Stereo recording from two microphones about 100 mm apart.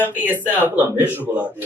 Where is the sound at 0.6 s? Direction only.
20° right (ahead or behind).